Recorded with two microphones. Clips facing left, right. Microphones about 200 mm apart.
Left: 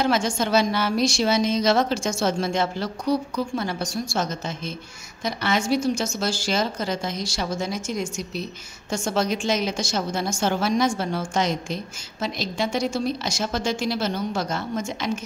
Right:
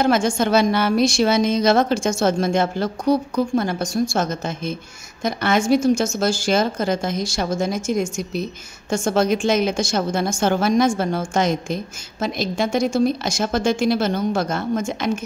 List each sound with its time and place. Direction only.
0.0 s a woman's voice: 50° right (ahead or behind)